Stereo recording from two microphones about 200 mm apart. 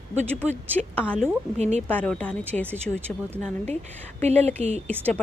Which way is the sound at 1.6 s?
35° right (ahead or behind).